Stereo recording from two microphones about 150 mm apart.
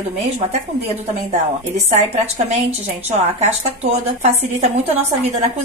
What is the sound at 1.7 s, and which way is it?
Speech, 45° right (ahead or behind).